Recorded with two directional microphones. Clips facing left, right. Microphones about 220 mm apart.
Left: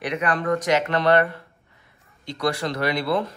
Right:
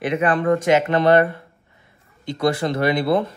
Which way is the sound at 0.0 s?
25° right (ahead or behind).